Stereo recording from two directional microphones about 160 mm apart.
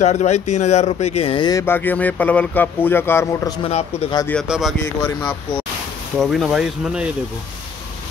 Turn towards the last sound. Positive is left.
turn(degrees=-5)  # may be behind; listen again after turning